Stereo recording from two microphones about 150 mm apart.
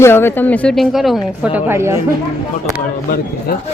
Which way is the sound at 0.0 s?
15° left (ahead or behind).